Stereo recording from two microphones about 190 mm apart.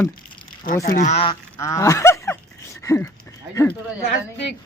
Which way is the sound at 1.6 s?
15° left (ahead or behind).